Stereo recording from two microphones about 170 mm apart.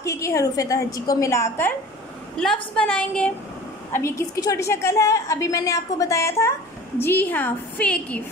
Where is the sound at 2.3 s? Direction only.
5° left (ahead or behind).